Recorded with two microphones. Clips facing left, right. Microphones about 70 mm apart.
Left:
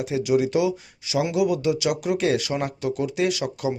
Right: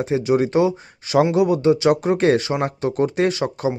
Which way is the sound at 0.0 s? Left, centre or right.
Right.